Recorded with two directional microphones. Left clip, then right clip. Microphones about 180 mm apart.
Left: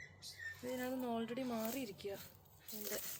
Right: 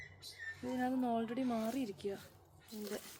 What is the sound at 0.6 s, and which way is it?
Speech, 20° right (ahead or behind).